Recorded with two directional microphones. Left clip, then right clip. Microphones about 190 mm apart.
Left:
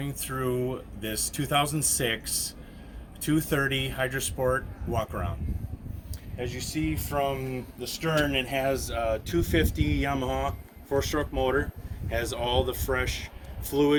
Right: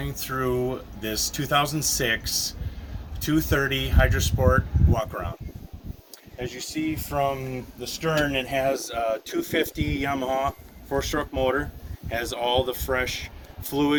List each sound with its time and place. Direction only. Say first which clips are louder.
0.0 s speech: right 4 dB; centre (ahead or behind)
6.3 s speech: right 1 dB; 5° right (ahead or behind)
6.9 s speech: right 4 dB; 25° right (ahead or behind); by 13.9 s 40° right (ahead or behind)